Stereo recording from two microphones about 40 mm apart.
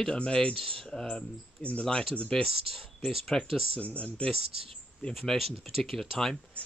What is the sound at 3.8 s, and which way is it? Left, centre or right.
Speech, left.